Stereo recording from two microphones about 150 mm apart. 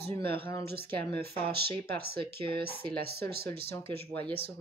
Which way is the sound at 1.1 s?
90° right.